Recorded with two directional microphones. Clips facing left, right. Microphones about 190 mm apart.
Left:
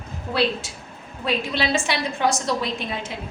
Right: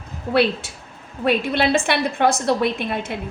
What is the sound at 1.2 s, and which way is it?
A woman's voice, 55° right (ahead or behind).